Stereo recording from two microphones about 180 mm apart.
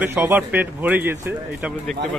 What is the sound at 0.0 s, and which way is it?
A man's voice, 10° right (ahead or behind).